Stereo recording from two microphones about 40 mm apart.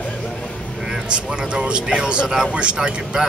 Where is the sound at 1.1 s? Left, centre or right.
Right.